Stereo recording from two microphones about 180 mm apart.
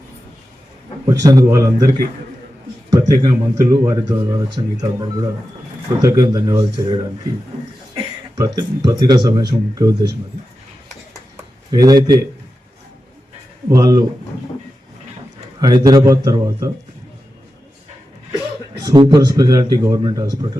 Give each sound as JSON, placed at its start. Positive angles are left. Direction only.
{"t": 1.0, "sound": "speech", "side_deg": -20}
{"t": 8.4, "sound": "speech", "side_deg": -25}
{"t": 11.7, "sound": "speech", "side_deg": -20}
{"t": 13.7, "sound": "speech", "side_deg": -20}
{"t": 15.6, "sound": "speech", "side_deg": -20}
{"t": 18.9, "sound": "speech", "side_deg": -25}